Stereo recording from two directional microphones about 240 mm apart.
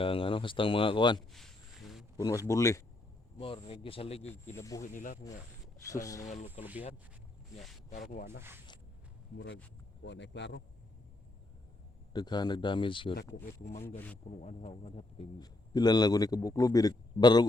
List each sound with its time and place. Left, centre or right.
0.0 s speech: left
1.3 s a sound: centre
2.1 s a man's voice: centre
4.5 s a man's voice: centre
4.8 s speech: left
5.9 s a man's voice: centre
6.2 s speech: left
8.1 s speech: left
8.4 s speech: centre
10.0 s speech: left
12.1 s speech: centre
13.8 s a man's voice: centre
14.3 s a man's voice: left